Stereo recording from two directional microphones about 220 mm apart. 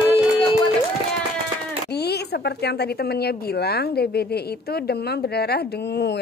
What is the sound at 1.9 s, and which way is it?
A woman's voice, 50° left (ahead or behind).